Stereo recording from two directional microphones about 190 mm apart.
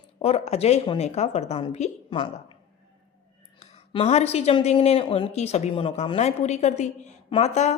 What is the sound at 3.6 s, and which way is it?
Speech, 35° left (ahead or behind).